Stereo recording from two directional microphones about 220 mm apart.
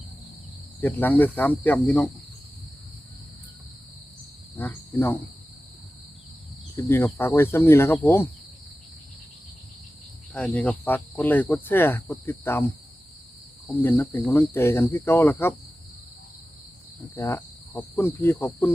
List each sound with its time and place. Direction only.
0.8 s cricket: 10° left (ahead or behind)
4.5 s cricket: 10° left (ahead or behind)
6.7 s cricket: 10° left (ahead or behind)
10.3 s cricket: 5° left (ahead or behind)
13.7 s cricket: 10° left (ahead or behind)
17.2 s cricket: 10° left (ahead or behind)